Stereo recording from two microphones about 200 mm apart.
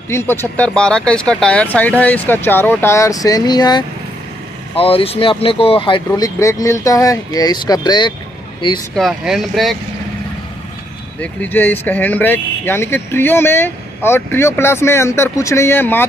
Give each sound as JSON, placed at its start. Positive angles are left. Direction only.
{"t": 0.1, "sound": "speech", "side_deg": 10}
{"t": 8.9, "sound": "speech", "side_deg": 0}
{"t": 11.1, "sound": "speech", "side_deg": 10}